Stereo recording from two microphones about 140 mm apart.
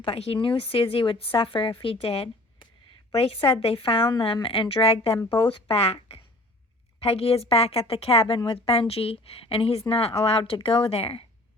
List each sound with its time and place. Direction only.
0.0 s a woman's voice: 45° left (ahead or behind)